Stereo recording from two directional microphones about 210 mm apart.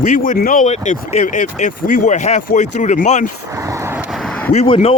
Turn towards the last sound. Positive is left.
turn(degrees=25)  # may be behind; listen again after turning